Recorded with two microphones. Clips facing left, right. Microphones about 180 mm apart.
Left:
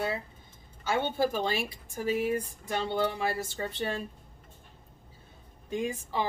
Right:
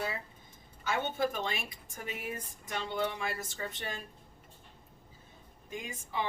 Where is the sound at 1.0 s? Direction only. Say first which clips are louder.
Left 4 dB; 30° left (ahead or behind).